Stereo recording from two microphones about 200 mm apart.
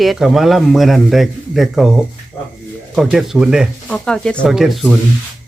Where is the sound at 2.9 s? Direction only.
Centre (ahead or behind).